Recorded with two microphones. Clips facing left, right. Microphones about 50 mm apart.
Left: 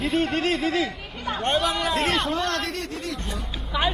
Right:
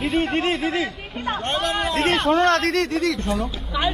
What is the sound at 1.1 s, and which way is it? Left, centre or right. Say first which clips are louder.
Speech: even; right.